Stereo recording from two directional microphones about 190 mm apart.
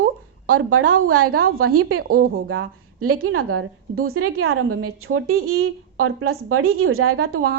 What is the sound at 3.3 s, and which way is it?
A woman's voice, 90° right.